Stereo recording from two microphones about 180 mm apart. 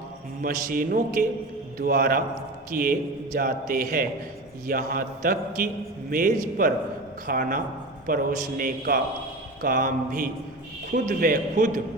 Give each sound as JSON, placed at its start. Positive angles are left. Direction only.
{"t": 0.4, "sound": "a man's voice", "side_deg": -50}